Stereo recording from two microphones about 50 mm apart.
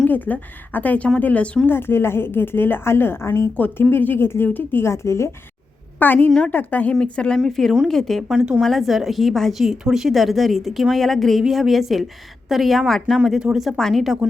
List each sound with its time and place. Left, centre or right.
0.1 s speech: left
1.6 s a woman's voice: left
3.6 s a woman's voice: left
4.4 s speech: left
4.8 s a woman's voice: left
6.0 s speech: left
7.0 s a woman's voice: centre
7.3 s a woman's voice: centre
8.3 s speech: centre
8.6 s a woman's voice: centre
14.2 s speech: centre